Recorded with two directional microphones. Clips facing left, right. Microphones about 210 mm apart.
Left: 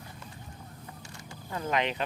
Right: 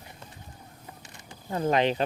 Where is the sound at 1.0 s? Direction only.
20° right (ahead or behind).